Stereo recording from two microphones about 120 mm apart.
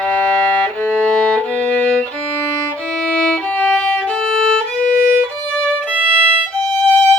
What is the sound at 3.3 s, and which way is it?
Violin, 10° left (ahead or behind).